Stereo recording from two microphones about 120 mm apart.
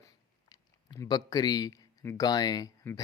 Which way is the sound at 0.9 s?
35° left (ahead or behind).